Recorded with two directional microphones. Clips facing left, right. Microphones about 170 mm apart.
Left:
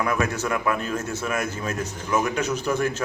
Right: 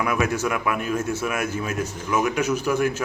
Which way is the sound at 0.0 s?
10° right (ahead or behind).